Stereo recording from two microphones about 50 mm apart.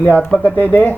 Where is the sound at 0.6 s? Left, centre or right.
Left.